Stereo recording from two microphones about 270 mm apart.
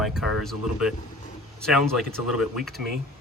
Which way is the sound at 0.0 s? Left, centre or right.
Centre.